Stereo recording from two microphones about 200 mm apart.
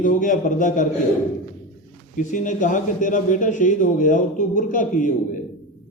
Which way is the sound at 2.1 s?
40° left (ahead or behind).